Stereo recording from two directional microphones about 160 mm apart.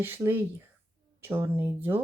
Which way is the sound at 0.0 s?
15° right (ahead or behind).